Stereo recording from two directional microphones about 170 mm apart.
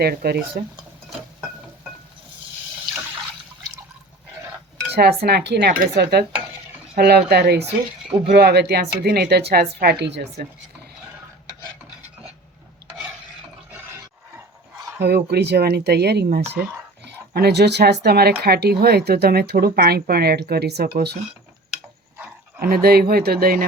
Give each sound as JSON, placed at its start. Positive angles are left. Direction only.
{"t": 0.0, "sound": "speech", "side_deg": -65}
{"t": 4.9, "sound": "speech", "side_deg": -70}
{"t": 15.0, "sound": "speech", "side_deg": -75}
{"t": 22.6, "sound": "speech", "side_deg": -65}